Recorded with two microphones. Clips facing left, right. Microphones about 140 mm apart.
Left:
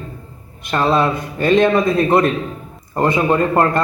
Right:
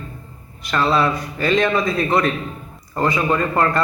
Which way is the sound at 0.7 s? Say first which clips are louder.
Left 2 dB; 25° left (ahead or behind).